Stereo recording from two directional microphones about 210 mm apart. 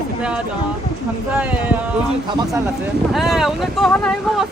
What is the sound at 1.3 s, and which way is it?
Speech, 5° right (ahead or behind).